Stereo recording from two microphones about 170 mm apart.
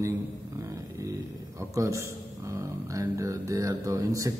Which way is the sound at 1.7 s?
15° right (ahead or behind).